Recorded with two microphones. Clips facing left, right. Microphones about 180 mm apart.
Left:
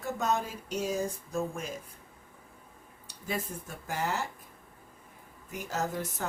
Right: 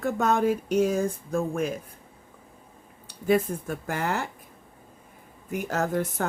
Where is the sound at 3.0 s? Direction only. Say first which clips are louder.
Right 13 dB; 55° right (ahead or behind).